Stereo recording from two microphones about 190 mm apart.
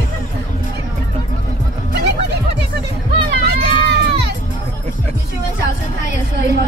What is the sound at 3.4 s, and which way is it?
Crowd, 60° right (ahead or behind).